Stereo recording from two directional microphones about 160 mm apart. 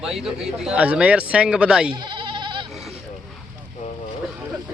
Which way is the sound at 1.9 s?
30° right (ahead or behind).